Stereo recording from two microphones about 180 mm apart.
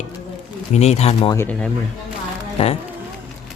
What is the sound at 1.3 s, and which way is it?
Speech, 10° left (ahead or behind).